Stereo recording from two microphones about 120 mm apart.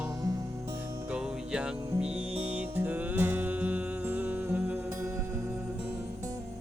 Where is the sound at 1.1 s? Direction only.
5° right (ahead or behind).